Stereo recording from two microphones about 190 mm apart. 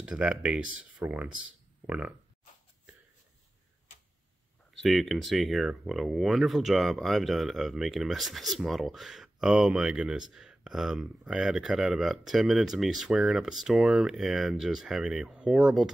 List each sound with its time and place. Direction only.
0.0 s speech: 5° right (ahead or behind)
4.8 s speech: centre (ahead or behind)